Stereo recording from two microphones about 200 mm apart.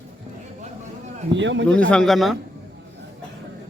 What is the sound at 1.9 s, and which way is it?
Speech, centre (ahead or behind).